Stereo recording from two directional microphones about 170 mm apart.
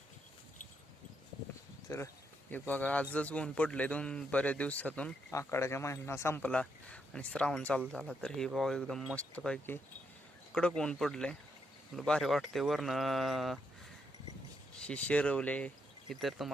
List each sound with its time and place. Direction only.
1.9 s a man's voice: 20° left (ahead or behind); by 13.6 s centre (ahead or behind)
14.8 s speech: 5° left (ahead or behind)